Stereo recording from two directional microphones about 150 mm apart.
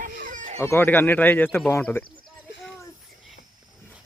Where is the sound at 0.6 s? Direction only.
15° left (ahead or behind).